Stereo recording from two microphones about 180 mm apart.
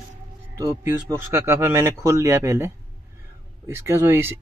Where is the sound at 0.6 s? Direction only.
15° right (ahead or behind).